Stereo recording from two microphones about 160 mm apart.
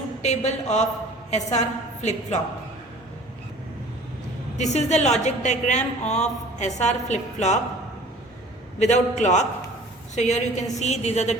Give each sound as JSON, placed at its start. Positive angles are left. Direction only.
{"t": 0.2, "sound": "a woman's voice", "side_deg": 45}
{"t": 4.5, "sound": "a woman's voice", "side_deg": 45}
{"t": 8.8, "sound": "a woman's voice", "side_deg": 45}